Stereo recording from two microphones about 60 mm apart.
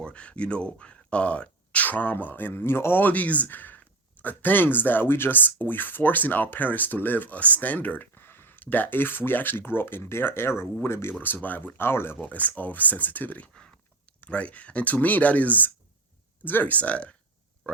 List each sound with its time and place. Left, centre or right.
0.0 s speech: centre; by 11.1 s left
11.4 s speech: left
12.2 s speech: left